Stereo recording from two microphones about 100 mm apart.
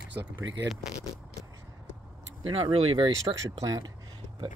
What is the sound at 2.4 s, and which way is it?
Speech, 55° right (ahead or behind).